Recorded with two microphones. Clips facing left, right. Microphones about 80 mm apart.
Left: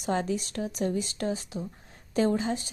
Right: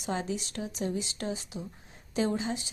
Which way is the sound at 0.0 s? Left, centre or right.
Left.